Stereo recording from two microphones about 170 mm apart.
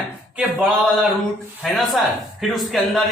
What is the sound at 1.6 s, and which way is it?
Speech, centre (ahead or behind).